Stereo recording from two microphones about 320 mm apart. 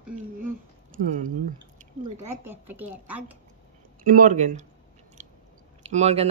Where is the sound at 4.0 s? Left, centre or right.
Right.